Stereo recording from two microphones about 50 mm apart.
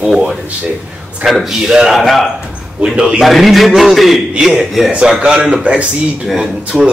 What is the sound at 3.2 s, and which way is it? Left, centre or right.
A man's voice, centre.